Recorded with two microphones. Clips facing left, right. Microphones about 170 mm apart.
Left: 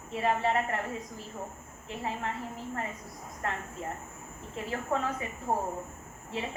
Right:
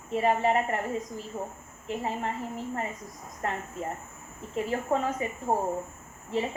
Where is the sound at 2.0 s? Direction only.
15° right (ahead or behind).